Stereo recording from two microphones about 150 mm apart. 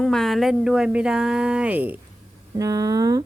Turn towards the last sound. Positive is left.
turn(degrees=-25)  # may be behind; listen again after turning